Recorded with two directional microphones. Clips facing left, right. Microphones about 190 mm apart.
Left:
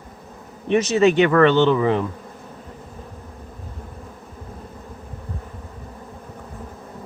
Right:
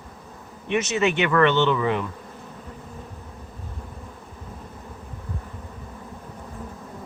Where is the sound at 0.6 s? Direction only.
35° left (ahead or behind).